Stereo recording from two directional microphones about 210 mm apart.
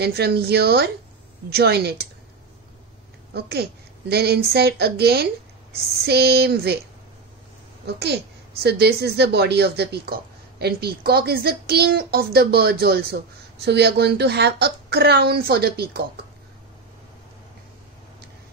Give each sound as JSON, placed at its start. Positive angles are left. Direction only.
{"t": 0.0, "sound": "a woman's voice", "side_deg": -50}
{"t": 3.3, "sound": "a woman's voice", "side_deg": -50}
{"t": 7.8, "sound": "a woman's voice", "side_deg": -50}